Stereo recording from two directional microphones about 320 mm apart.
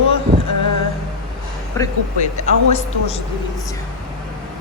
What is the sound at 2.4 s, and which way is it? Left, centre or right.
Speech, left.